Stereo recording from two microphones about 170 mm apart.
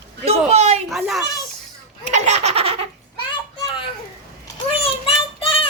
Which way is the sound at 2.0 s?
45° right (ahead or behind).